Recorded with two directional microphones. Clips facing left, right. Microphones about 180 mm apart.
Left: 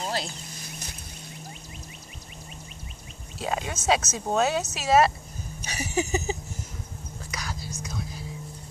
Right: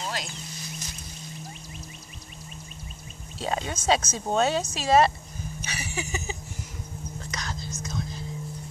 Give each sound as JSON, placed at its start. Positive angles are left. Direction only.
{"t": 0.0, "sound": "a sound", "side_deg": 35}
{"t": 3.3, "sound": "speech", "side_deg": 5}
{"t": 5.6, "sound": "speech", "side_deg": 40}
{"t": 7.2, "sound": "whispering", "side_deg": 10}